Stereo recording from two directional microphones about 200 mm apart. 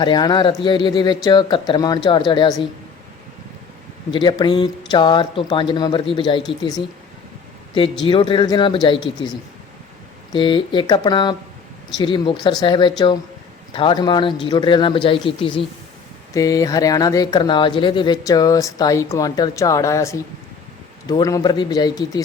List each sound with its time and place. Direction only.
0.0 s speech: 20° left (ahead or behind)
4.1 s speech: 25° left (ahead or behind)
8.0 s speech: 25° left (ahead or behind)
10.3 s speech: 25° left (ahead or behind)